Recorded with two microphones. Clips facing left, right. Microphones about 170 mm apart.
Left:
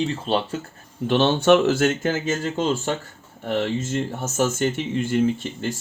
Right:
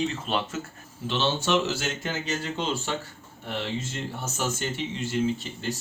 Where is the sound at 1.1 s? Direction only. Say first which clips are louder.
Left 9 dB; 55° left (ahead or behind).